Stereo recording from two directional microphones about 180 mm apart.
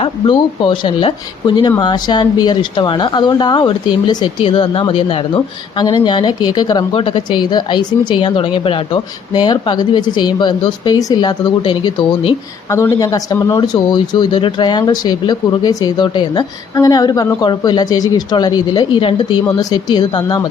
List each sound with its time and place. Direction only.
0.0 s a woman's voice: 25° left (ahead or behind)
12.7 s a woman's voice: 15° left (ahead or behind)